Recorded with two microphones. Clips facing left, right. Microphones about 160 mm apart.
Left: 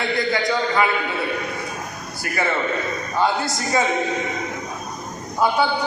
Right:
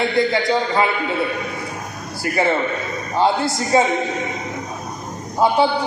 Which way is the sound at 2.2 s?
25° right (ahead or behind).